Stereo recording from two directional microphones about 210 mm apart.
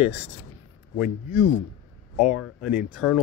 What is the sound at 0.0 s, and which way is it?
Speech, 10° right (ahead or behind).